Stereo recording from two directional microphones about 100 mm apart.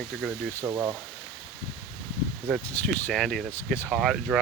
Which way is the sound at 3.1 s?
5° left (ahead or behind).